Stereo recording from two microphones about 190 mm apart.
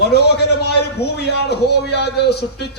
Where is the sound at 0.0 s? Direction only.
60° left (ahead or behind).